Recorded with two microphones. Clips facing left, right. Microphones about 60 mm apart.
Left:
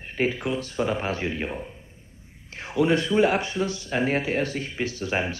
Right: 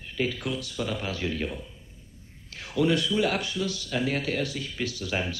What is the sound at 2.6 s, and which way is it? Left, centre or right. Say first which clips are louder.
Speech: left 3 dB; left.